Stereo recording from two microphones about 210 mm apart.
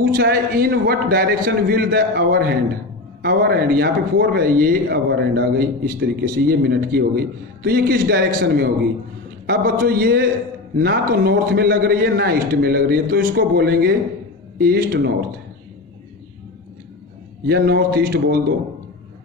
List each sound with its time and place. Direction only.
0.0 s speech: 45° right (ahead or behind)
17.5 s speech: 50° right (ahead or behind)